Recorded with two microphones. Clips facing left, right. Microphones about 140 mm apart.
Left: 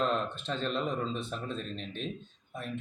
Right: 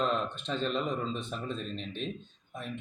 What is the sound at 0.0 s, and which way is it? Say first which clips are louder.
Speech: even; centre (ahead or behind).